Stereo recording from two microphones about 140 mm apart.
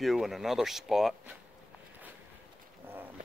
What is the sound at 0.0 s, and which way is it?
Speech, centre (ahead or behind).